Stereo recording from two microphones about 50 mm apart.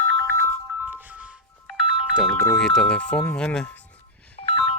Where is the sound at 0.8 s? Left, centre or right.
Right.